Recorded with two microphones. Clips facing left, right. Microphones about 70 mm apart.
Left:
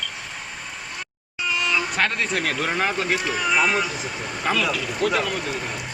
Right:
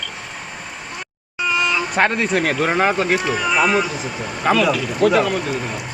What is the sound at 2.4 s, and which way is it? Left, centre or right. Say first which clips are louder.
Speech: right 7 dB; right.